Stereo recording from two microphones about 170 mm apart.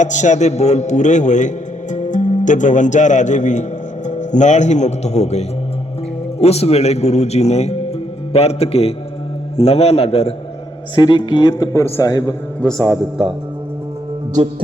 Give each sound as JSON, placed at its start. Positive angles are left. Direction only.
{"t": 0.0, "sound": "a man's voice", "side_deg": 45}
{"t": 10.9, "sound": "a man's voice", "side_deg": 25}
{"t": 12.5, "sound": "a man's voice", "side_deg": 5}